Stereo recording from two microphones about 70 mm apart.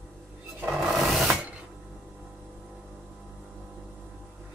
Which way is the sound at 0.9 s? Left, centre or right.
Centre.